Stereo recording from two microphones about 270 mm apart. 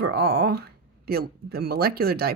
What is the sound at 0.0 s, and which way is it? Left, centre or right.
Speech, right.